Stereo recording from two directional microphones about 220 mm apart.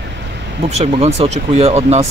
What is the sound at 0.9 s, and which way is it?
Speech, 25° right (ahead or behind).